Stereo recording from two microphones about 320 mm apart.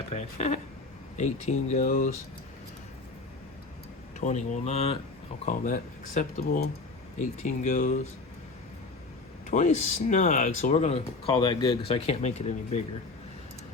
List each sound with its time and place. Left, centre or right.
0.1 s speech: left
4.2 s speech: left
9.5 s speech: left